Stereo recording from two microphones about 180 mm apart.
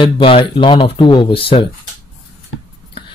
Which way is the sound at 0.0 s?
25° left (ahead or behind).